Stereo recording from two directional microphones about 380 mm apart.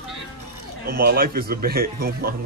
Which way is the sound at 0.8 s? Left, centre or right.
Right.